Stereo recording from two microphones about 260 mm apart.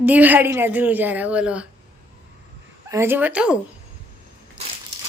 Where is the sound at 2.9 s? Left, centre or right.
Centre.